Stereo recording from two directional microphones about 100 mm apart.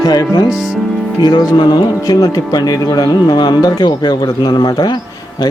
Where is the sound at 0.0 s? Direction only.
40° left (ahead or behind).